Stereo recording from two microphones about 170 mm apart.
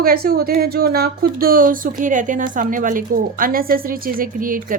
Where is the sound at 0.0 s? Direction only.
60° right (ahead or behind).